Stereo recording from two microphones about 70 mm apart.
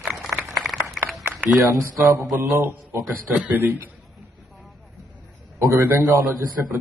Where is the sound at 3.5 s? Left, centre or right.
Right.